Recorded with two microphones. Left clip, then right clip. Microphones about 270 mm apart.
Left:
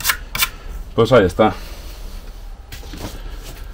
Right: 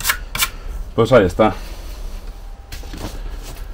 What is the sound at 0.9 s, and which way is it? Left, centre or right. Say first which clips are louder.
Speech: even; left.